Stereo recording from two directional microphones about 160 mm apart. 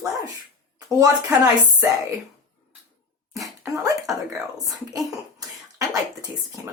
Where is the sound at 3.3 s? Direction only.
20° right (ahead or behind).